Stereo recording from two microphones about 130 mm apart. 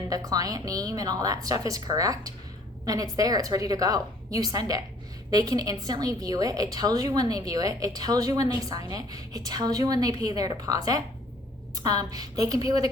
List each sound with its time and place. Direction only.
0.1 s a woman's voice: 30° right (ahead or behind)